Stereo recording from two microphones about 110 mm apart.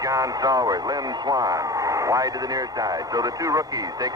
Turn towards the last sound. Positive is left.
turn(degrees=-30)  # may be behind; listen again after turning